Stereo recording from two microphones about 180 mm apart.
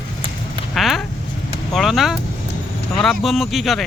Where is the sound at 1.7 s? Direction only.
Centre (ahead or behind).